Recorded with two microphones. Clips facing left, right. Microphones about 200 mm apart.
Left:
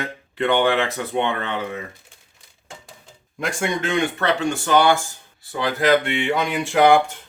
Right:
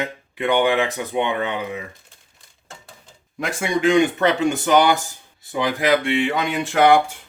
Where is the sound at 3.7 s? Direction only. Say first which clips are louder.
Right 6 dB; 15° right (ahead or behind).